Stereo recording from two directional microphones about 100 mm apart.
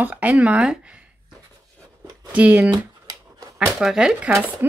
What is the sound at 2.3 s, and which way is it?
Speech, 15° right (ahead or behind).